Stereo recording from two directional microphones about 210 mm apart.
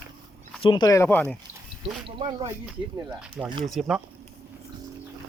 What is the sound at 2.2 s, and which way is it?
Speech, 20° right (ahead or behind).